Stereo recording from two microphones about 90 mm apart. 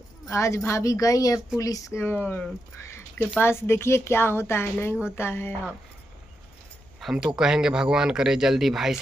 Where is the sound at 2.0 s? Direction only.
20° left (ahead or behind).